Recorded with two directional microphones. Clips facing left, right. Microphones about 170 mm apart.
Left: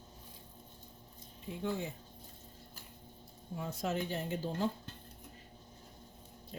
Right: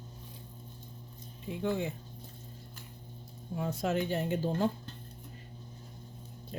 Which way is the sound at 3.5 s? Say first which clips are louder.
Right 5 dB; 65° right (ahead or behind).